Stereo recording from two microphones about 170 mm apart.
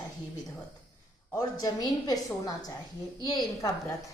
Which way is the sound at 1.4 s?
25° left (ahead or behind).